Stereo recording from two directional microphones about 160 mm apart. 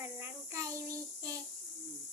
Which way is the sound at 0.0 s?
15° right (ahead or behind).